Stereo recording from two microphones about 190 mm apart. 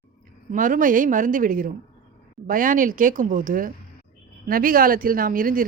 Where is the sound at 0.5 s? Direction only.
45° right (ahead or behind).